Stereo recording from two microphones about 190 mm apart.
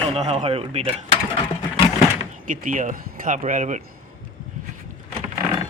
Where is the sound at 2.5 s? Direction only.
45° right (ahead or behind).